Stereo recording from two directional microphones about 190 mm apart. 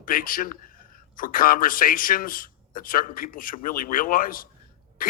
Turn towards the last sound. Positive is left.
turn(degrees=45)  # may be behind; listen again after turning